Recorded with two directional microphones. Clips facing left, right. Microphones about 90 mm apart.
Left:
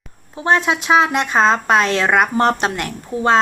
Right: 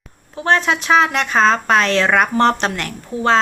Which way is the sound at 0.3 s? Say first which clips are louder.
Even; 15° left (ahead or behind).